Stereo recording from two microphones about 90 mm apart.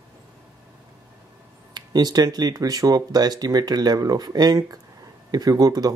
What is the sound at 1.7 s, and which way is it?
Speech, 45° right (ahead or behind).